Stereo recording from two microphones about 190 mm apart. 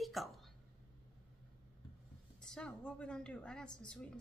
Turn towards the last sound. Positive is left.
turn(degrees=5)  # may be behind; listen again after turning